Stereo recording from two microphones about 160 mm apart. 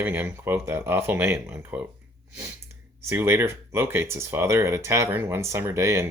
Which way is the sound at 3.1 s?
15° right (ahead or behind).